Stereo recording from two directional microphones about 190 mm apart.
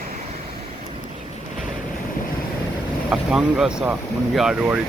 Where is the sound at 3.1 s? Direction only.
5° right (ahead or behind).